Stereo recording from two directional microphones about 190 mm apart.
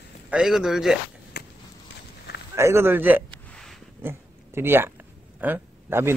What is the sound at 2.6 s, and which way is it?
A man's voice, 15° right (ahead or behind).